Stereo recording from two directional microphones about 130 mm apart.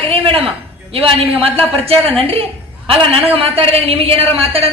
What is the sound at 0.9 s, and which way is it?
A man's voice, 50° right (ahead or behind).